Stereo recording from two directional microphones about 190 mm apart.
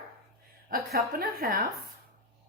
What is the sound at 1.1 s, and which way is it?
Speech, 50° right (ahead or behind).